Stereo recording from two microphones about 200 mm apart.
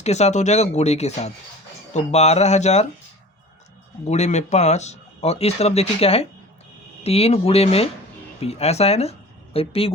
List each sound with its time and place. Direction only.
0.0 s speech: 35° left (ahead or behind)
4.0 s speech: 35° left (ahead or behind)